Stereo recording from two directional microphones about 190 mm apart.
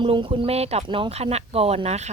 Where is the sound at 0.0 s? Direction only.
25° right (ahead or behind).